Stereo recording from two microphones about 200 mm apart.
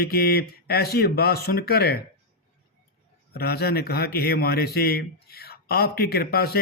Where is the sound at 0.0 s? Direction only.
50° left (ahead or behind).